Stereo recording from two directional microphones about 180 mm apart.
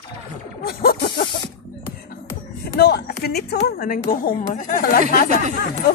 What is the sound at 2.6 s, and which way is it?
Speech, 60° left (ahead or behind).